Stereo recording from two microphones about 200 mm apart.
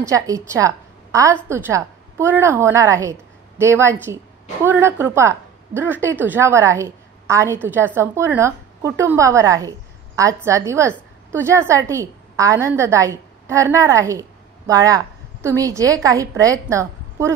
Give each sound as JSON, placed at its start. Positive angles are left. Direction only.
{"t": 0.0, "sound": "a woman's voice", "side_deg": -15}